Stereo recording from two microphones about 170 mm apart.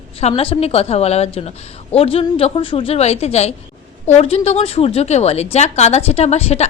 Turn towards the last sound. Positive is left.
turn(degrees=40)  # may be behind; listen again after turning